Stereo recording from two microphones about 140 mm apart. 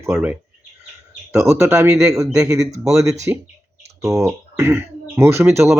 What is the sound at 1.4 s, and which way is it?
Speech, 20° right (ahead or behind).